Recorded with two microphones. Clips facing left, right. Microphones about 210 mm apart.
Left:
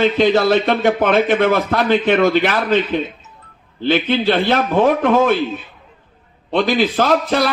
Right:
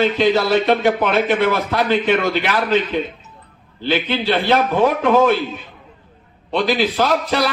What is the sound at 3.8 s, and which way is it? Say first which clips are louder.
A man's voice: left 3 dB; 50° left (ahead or behind).